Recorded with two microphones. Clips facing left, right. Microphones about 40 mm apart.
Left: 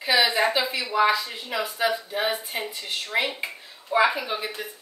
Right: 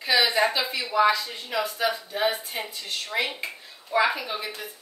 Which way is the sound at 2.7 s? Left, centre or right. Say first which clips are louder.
Left 3 dB; left.